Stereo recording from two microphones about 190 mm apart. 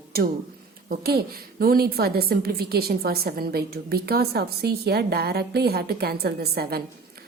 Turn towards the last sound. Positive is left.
turn(degrees=-55)  # may be behind; listen again after turning